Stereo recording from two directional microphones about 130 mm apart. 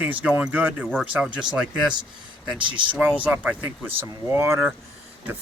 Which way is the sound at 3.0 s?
15° right (ahead or behind).